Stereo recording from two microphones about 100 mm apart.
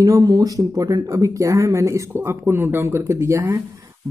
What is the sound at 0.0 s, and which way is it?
Speech, 40° right (ahead or behind).